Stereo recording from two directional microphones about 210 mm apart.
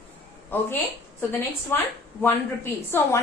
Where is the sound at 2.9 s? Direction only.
10° left (ahead or behind).